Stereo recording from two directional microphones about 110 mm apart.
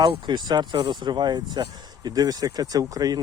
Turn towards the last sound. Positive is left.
turn(degrees=-35)  # may be behind; listen again after turning